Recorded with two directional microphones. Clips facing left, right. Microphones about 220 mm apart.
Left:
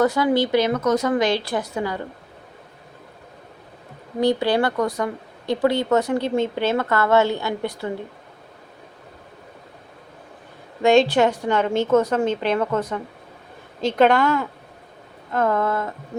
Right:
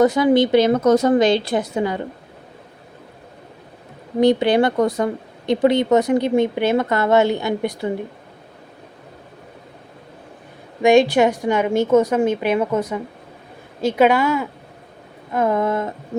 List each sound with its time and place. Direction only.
0.0 s a woman's voice: 20° right (ahead or behind)
4.2 s speech: 20° right (ahead or behind)
10.8 s speech: 10° right (ahead or behind)